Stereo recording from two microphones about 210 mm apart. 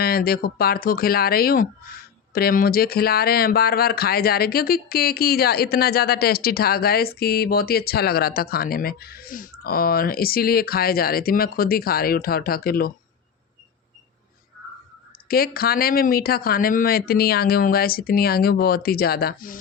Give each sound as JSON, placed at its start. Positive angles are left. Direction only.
{"t": 0.0, "sound": "speech", "side_deg": 45}
{"t": 15.3, "sound": "speech", "side_deg": 45}